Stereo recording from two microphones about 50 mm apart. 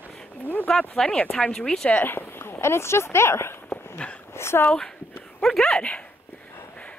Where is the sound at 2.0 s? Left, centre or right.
Left.